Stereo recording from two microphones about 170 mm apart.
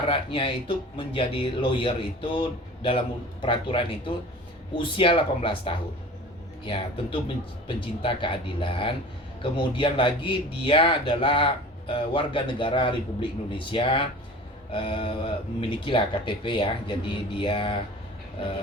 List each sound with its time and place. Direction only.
0.1 s speech: 30° left (ahead or behind)